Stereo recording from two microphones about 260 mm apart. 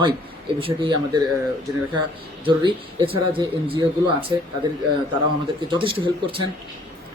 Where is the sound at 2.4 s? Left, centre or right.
Centre.